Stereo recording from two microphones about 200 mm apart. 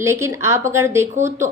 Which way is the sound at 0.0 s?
15° right (ahead or behind).